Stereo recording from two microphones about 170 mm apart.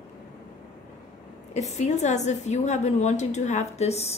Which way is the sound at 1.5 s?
40° left (ahead or behind).